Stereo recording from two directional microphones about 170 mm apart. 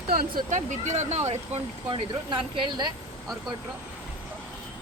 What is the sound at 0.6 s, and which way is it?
Speech, 45° right (ahead or behind).